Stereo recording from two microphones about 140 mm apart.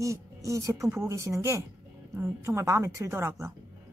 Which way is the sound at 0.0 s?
20° right (ahead or behind).